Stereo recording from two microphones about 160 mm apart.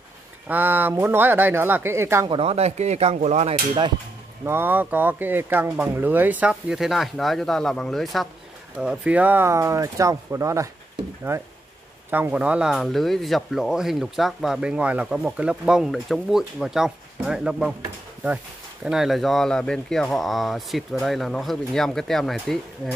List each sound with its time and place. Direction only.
0.5 s speech: 10° right (ahead or behind)
2.2 s speech: 35° right (ahead or behind)
4.5 s speech: 15° right (ahead or behind)
18.9 s speech: centre (ahead or behind)